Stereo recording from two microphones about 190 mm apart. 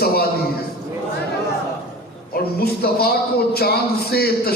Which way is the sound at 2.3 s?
55° left (ahead or behind).